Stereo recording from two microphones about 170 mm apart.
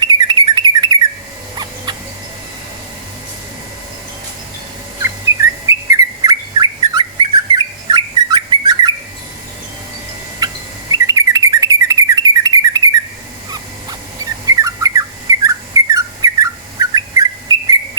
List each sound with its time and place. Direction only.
0.0 s bird: 25° right (ahead or behind)
5.0 s bird: 15° right (ahead or behind)
10.4 s bird: 20° right (ahead or behind)
14.4 s bird: 20° right (ahead or behind)